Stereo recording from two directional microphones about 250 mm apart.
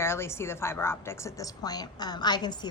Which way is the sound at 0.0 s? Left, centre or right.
Centre.